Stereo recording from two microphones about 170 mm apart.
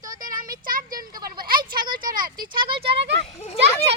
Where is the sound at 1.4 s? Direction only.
60° right (ahead or behind).